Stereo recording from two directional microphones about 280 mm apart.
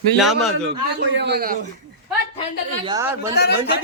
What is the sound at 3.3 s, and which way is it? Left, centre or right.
Speech, left.